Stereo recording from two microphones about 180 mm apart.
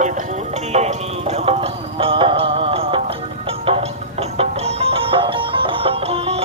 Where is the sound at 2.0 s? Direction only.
30° right (ahead or behind).